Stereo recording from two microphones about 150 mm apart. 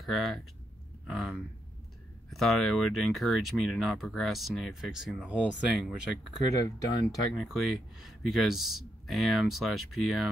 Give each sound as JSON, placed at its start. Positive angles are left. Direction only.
{"t": 0.0, "sound": "speech", "side_deg": 0}
{"t": 6.5, "sound": "speech", "side_deg": 25}
{"t": 7.3, "sound": "speech", "side_deg": 0}